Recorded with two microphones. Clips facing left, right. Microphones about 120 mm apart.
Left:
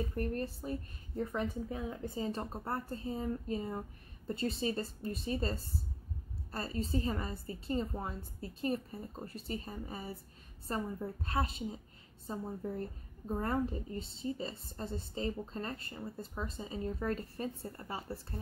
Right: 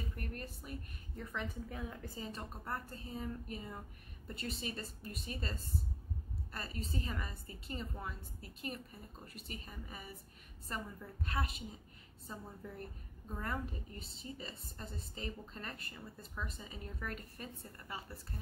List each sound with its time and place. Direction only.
0.1 s a woman's voice: 35° left (ahead or behind)
1.7 s a woman's voice: 20° left (ahead or behind)